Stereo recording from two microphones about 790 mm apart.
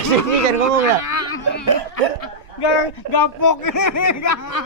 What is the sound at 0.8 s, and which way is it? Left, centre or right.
Speech, left.